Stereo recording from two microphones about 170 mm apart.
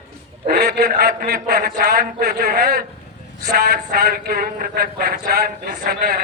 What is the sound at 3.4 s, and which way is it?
A man's voice, 70° right (ahead or behind).